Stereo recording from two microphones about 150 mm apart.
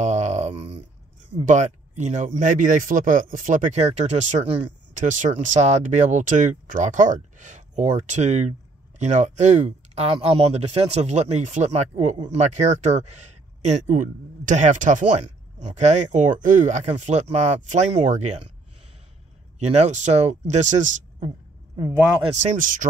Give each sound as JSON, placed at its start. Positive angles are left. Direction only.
{"t": 0.0, "sound": "a sound", "side_deg": -50}
{"t": 1.4, "sound": "speech", "side_deg": -55}
{"t": 19.6, "sound": "speech", "side_deg": -50}
{"t": 22.4, "sound": "speech", "side_deg": -60}